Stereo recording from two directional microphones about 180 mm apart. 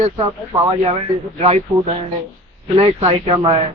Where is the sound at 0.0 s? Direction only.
30° right (ahead or behind).